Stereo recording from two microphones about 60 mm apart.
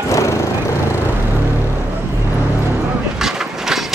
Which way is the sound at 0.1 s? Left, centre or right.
Left.